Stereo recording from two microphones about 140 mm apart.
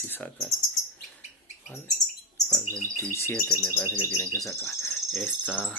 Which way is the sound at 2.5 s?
20° right (ahead or behind).